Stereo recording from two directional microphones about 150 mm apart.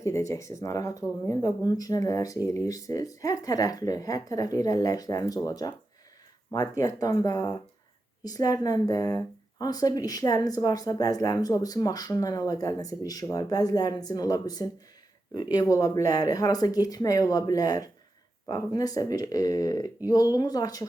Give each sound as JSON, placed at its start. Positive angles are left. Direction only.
{"t": 0.0, "sound": "speech", "side_deg": 20}